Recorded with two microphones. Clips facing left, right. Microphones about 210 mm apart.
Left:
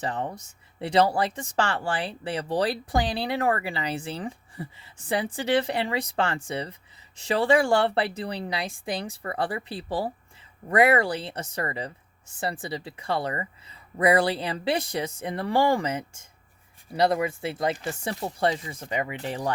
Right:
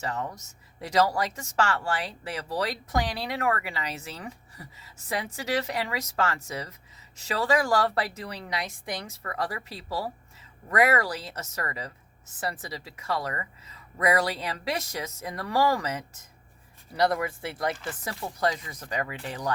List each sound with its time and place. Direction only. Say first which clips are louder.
0.0 s speech: left 2 dB; 30° left (ahead or behind)